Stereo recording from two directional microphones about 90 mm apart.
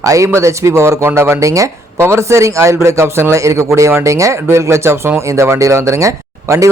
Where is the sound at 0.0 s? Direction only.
35° right (ahead or behind).